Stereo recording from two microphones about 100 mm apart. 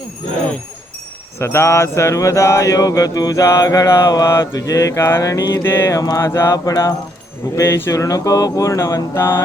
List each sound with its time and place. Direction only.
1.4 s mantra: 25° left (ahead or behind)
5.6 s mantra: 25° left (ahead or behind)
6.0 s mantra: 35° left (ahead or behind)